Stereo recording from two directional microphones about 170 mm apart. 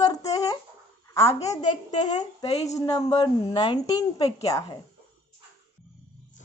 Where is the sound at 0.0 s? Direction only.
20° left (ahead or behind).